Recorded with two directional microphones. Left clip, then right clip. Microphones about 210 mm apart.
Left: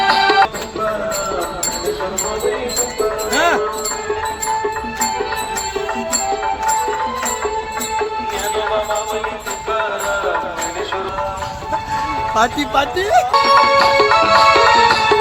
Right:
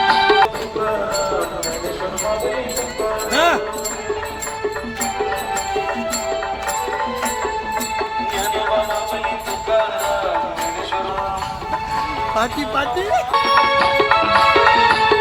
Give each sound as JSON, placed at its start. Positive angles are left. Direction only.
{"t": 0.0, "sound": "music", "side_deg": 30}
{"t": 3.3, "sound": "music", "side_deg": -5}
{"t": 12.3, "sound": "speech", "side_deg": 10}
{"t": 13.3, "sound": "music", "side_deg": 55}